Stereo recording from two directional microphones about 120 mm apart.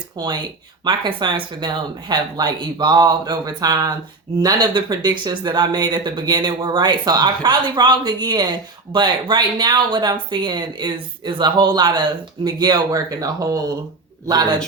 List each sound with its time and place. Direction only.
0.2 s speech: 35° right (ahead or behind)